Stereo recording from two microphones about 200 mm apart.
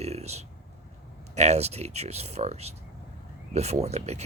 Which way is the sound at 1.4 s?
35° right (ahead or behind).